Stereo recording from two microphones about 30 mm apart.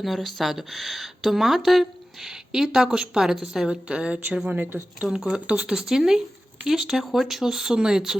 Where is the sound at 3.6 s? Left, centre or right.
Right.